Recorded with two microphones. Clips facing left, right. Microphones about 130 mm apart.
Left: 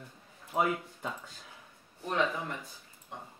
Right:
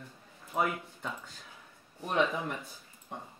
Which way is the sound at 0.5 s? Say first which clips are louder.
Left 1 dB; 10° left (ahead or behind).